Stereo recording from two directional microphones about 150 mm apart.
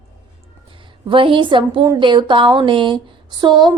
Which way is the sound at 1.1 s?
35° right (ahead or behind).